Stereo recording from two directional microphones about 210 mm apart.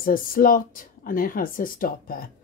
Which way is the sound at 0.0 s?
40° left (ahead or behind).